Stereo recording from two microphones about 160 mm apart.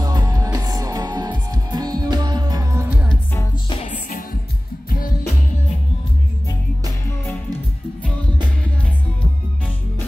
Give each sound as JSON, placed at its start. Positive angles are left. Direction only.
{"t": 0.0, "sound": "music", "side_deg": -25}